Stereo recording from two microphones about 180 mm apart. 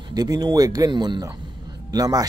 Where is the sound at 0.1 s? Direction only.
20° right (ahead or behind).